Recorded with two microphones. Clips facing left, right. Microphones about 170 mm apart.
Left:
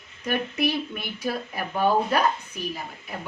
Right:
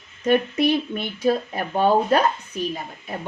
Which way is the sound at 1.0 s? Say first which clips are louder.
Right 8 dB; 25° right (ahead or behind).